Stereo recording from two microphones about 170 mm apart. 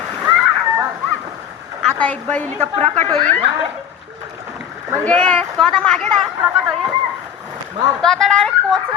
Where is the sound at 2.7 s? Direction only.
35° right (ahead or behind).